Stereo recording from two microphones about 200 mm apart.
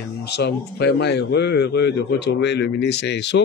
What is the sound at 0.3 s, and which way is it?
Speech, 55° left (ahead or behind).